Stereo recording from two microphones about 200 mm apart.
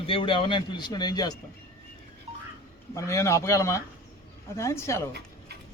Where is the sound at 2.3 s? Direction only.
30° right (ahead or behind).